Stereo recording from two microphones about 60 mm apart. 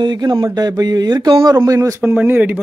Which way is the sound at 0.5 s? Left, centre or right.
Right.